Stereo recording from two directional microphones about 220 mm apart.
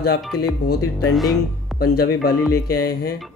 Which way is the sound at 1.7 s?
45° left (ahead or behind).